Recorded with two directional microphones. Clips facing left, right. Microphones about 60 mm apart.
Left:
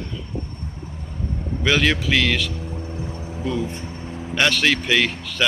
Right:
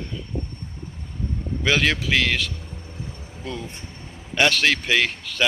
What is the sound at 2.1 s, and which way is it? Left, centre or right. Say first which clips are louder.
Speech: left 1 dB; right.